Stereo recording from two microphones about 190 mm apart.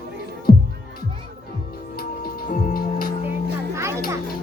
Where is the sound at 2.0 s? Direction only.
50° left (ahead or behind).